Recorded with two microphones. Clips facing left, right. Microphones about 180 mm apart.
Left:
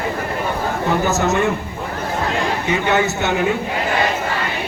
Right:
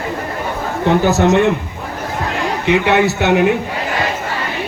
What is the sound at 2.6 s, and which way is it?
Speech, 70° right (ahead or behind).